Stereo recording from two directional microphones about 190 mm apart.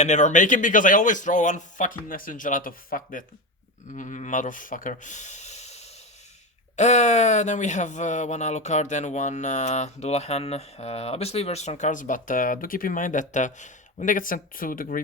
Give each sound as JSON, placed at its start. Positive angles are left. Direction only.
{"t": 0.0, "sound": "speech", "side_deg": 40}